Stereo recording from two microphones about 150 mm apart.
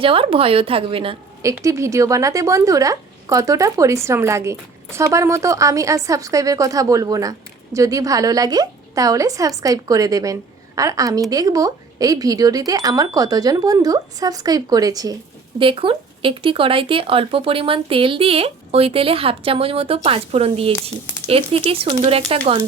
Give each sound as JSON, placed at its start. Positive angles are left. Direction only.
{"t": 0.0, "sound": "speech", "side_deg": -35}
{"t": 1.4, "sound": "speech", "side_deg": -20}
{"t": 15.5, "sound": "speech", "side_deg": -35}